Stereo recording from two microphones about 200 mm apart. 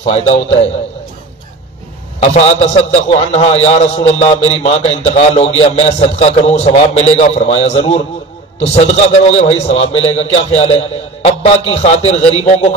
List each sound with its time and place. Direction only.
0.0 s a man's voice: 30° left (ahead or behind)
2.1 s a man's voice: 35° left (ahead or behind)